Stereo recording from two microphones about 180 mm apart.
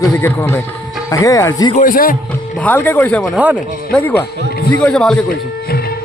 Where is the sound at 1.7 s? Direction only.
50° left (ahead or behind).